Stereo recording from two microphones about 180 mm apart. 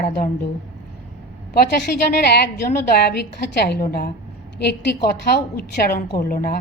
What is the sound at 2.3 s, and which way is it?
A woman's voice, 60° left (ahead or behind).